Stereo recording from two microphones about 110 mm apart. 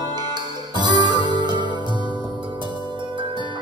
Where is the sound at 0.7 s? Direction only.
40° right (ahead or behind).